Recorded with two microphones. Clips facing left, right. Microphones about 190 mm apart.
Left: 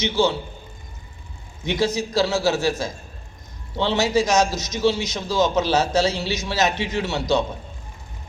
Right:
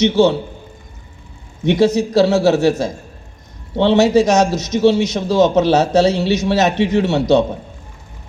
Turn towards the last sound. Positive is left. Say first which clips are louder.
# right 8 dB
turn(degrees=-65)  # may be behind; listen again after turning